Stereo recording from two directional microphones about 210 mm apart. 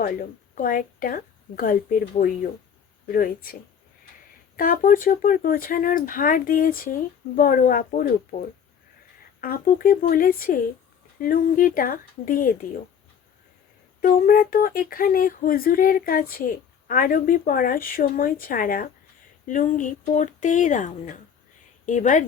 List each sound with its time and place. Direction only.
0.0 s speech: 40° left (ahead or behind)
14.0 s speech: 45° left (ahead or behind)